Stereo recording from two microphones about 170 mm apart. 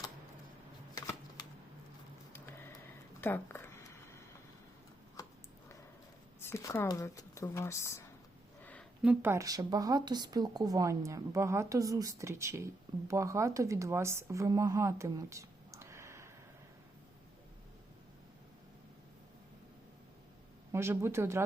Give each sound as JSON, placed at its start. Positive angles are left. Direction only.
{"t": 0.9, "sound": "shuffling cards", "side_deg": 20}
{"t": 2.3, "sound": "a sound", "side_deg": 10}
{"t": 6.4, "sound": "speech", "side_deg": 15}
{"t": 8.6, "sound": "a sound", "side_deg": 10}
{"t": 9.0, "sound": "speech", "side_deg": -10}
{"t": 20.7, "sound": "speech", "side_deg": -15}